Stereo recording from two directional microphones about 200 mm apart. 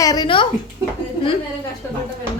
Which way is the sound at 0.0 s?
20° left (ahead or behind).